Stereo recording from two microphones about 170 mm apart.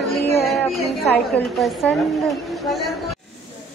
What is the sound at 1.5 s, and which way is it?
Speech, centre (ahead or behind).